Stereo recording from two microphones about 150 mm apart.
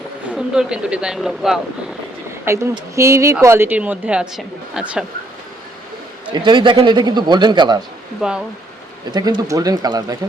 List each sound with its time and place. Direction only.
0.3 s speech: 5° right (ahead or behind)
2.4 s a man's voice: 20° right (ahead or behind)
6.3 s a man's voice: 30° right (ahead or behind)
8.2 s speech: 5° right (ahead or behind)
9.1 s a man's voice: 25° right (ahead or behind)